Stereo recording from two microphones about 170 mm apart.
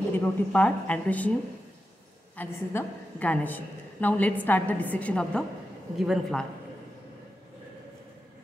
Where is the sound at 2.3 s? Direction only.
10° left (ahead or behind).